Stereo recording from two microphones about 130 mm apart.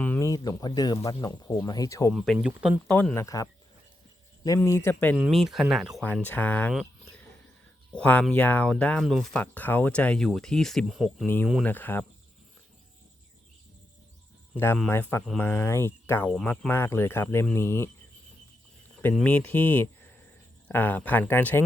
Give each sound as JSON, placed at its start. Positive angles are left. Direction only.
{"t": 0.2, "sound": "speech", "side_deg": 25}
{"t": 2.1, "sound": "speech", "side_deg": 0}
{"t": 2.9, "sound": "speech", "side_deg": 10}
{"t": 3.2, "sound": "speech", "side_deg": 25}
{"t": 5.1, "sound": "speech", "side_deg": 0}
{"t": 6.2, "sound": "speech", "side_deg": 15}
{"t": 7.9, "sound": "speech", "side_deg": 10}
{"t": 11.6, "sound": "speech", "side_deg": 15}
{"t": 14.5, "sound": "speech", "side_deg": 15}
{"t": 19.2, "sound": "speech", "side_deg": 15}